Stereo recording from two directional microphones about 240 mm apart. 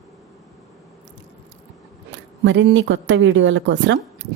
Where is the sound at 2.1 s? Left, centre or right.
Right.